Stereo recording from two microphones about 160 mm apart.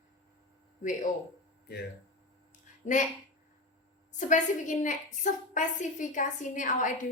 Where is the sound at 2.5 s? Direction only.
50° left (ahead or behind).